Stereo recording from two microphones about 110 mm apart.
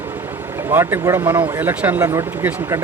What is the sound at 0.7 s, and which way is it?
A man's voice, 20° right (ahead or behind).